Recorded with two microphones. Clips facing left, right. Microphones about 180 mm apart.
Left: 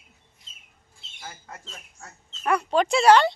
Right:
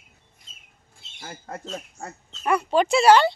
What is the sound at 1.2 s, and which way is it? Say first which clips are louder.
Speech: right 5 dB; 45° right (ahead or behind).